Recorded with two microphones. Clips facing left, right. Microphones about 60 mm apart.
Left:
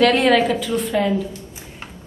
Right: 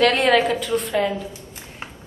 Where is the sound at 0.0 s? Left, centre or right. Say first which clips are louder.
Left 2 dB; centre.